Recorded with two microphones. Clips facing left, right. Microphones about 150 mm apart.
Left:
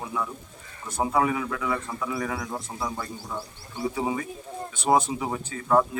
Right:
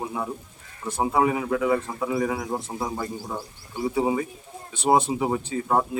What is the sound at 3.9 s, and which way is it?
Speech, 30° right (ahead or behind).